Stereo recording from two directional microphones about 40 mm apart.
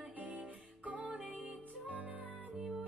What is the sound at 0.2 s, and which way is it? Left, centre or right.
Music, right.